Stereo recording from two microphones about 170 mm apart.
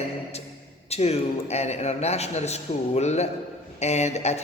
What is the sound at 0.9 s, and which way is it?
A man's voice, 40° left (ahead or behind).